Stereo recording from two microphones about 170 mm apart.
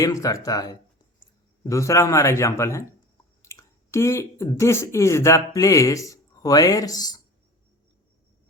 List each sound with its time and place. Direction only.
0.0 s speech: 20° left (ahead or behind)